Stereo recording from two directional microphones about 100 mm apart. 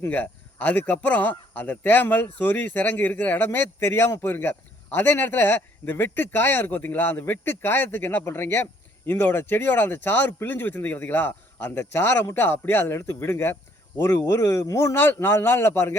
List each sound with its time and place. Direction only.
0.0 s speech: 15° left (ahead or behind)